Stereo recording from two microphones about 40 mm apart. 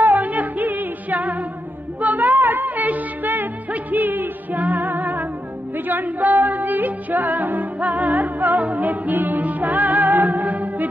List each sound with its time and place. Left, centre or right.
0.0 s music: right